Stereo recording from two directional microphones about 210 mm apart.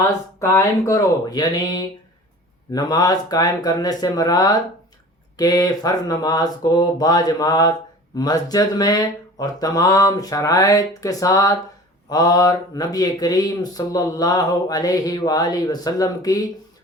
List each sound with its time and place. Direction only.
0.3 s speech: 15° left (ahead or behind)